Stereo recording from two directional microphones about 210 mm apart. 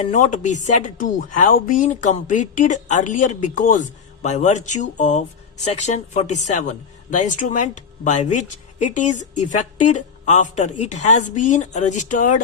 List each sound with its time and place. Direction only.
0.1 s speech: 35° left (ahead or behind)